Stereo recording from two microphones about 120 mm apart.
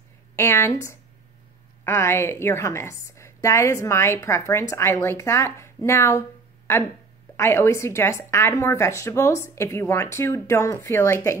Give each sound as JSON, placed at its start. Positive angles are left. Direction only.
{"t": 0.4, "sound": "a woman's voice", "side_deg": 20}
{"t": 7.3, "sound": "a woman's voice", "side_deg": 20}